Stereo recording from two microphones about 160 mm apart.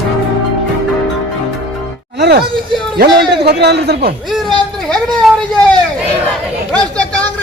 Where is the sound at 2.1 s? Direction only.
90° right.